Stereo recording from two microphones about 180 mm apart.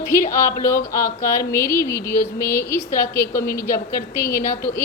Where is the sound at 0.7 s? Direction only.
15° left (ahead or behind).